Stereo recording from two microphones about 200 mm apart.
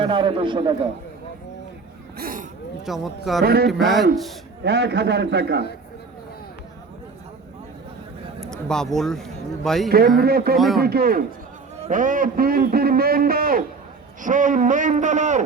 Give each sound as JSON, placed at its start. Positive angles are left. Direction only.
{"t": 0.0, "sound": "a man's voice", "side_deg": -25}
{"t": 2.1, "sound": "a sound", "side_deg": -45}
{"t": 2.8, "sound": "speech", "side_deg": 0}
{"t": 3.4, "sound": "a man's voice", "side_deg": -50}
{"t": 3.7, "sound": "speech", "side_deg": 0}
{"t": 4.6, "sound": "a man's voice", "side_deg": -55}
{"t": 8.4, "sound": "a man's voice", "side_deg": 5}
{"t": 10.2, "sound": "a man's voice", "side_deg": -50}